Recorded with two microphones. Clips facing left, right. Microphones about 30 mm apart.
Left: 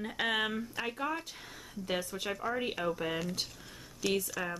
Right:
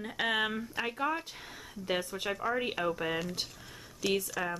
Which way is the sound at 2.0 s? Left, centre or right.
Right.